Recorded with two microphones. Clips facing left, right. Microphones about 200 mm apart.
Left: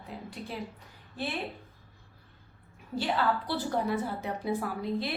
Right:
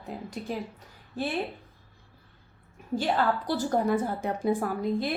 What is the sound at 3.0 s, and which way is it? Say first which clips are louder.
A woman's voice: right 2 dB; 45° right (ahead or behind).